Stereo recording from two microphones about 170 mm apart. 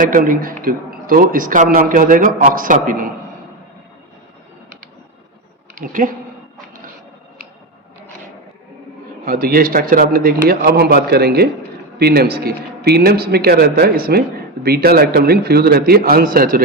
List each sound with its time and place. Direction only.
0.0 s speech: 55° right (ahead or behind)
5.8 s speech: 50° right (ahead or behind)
9.2 s a man's voice: 60° right (ahead or behind)